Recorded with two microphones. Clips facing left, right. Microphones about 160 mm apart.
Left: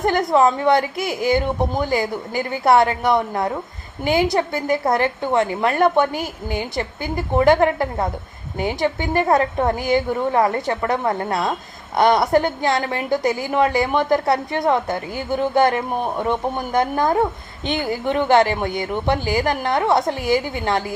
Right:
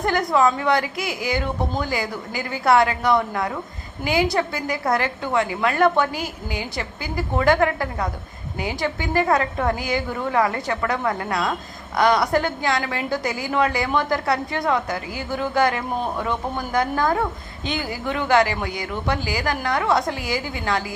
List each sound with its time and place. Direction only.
0.0 s a woman's voice: 20° left (ahead or behind)